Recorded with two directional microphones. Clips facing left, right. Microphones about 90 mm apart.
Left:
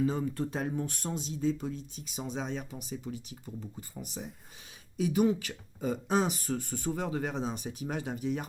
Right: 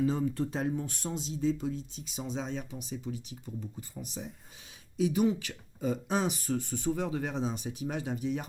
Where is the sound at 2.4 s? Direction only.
45° left (ahead or behind).